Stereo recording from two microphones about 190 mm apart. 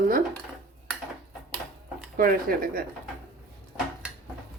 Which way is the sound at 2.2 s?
50° right (ahead or behind).